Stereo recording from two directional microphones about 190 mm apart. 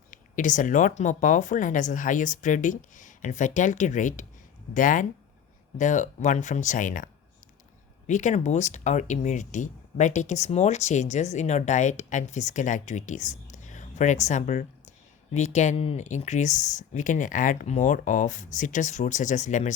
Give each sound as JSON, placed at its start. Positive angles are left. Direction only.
{"t": 0.1, "sound": "speech", "side_deg": 45}